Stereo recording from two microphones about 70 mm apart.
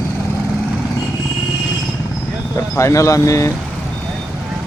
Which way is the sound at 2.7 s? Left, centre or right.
Left.